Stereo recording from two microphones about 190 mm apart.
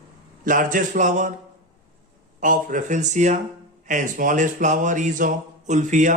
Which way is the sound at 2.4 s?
45° right (ahead or behind).